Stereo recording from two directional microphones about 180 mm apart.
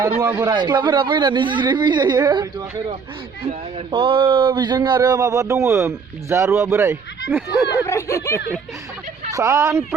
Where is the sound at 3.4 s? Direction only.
35° right (ahead or behind); by 7.4 s 15° right (ahead or behind).